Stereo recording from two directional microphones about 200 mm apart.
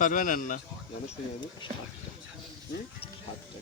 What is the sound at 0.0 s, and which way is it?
Speech, 40° left (ahead or behind).